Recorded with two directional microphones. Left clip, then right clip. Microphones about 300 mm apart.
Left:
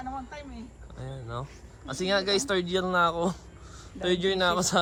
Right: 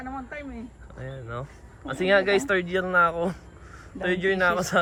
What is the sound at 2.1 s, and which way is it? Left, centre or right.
A man's voice, centre.